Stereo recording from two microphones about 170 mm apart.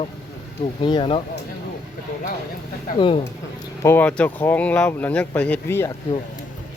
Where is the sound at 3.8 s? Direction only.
10° left (ahead or behind).